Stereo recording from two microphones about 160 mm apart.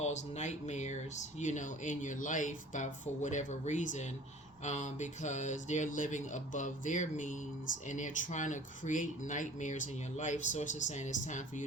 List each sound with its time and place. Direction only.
0.0 s speech: 45° left (ahead or behind)